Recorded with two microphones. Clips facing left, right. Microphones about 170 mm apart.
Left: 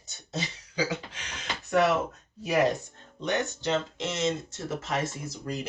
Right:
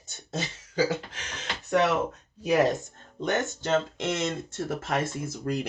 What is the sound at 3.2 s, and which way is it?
Speech, 50° right (ahead or behind).